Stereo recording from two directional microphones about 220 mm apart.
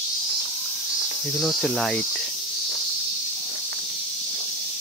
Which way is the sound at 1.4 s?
Centre (ahead or behind).